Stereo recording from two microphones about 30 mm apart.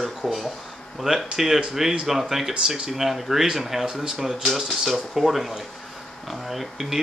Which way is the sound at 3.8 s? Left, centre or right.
Right.